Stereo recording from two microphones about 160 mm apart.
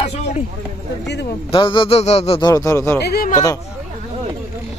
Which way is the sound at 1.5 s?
30° left (ahead or behind).